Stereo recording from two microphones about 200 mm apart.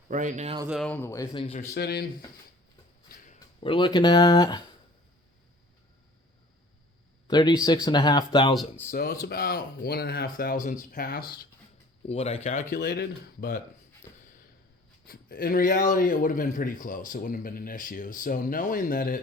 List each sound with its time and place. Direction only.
0.1 s speech: 40° right (ahead or behind)
0.7 s speech: 5° left (ahead or behind); by 1.5 s 25° left (ahead or behind)
1.7 s a man's voice: 50° left (ahead or behind)
3.2 s speech: 25° left (ahead or behind)
7.3 s speech: 20° left (ahead or behind)
8.9 s a man's voice: 50° left (ahead or behind)
12.0 s speech: 30° left (ahead or behind)
12.7 s a man's voice: 50° left (ahead or behind)
14.1 s snort: 20° left (ahead or behind)
15.0 s a man's voice: 45° left (ahead or behind)